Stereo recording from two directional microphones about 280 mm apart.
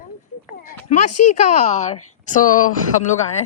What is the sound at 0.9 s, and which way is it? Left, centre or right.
Speech, left.